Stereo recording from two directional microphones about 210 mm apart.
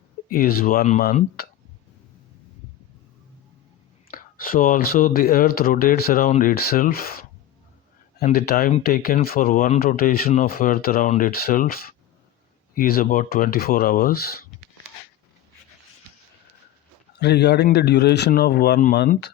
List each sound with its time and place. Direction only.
0.3 s speech: 45° left (ahead or behind)
4.1 s speech: 45° left (ahead or behind)
17.2 s speech: 50° left (ahead or behind)